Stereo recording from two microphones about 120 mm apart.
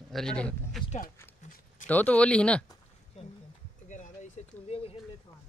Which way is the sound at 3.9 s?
90° left.